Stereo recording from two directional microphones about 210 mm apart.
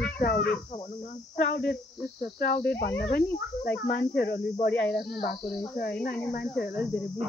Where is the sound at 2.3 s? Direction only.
50° left (ahead or behind).